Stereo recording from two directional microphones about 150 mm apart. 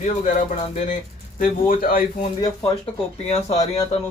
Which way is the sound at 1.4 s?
70° left (ahead or behind).